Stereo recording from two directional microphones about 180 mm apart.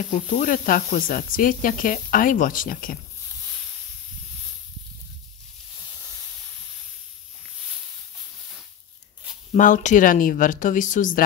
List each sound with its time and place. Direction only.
0.1 s snake: 45° left (ahead or behind)
9.5 s snake: 45° left (ahead or behind)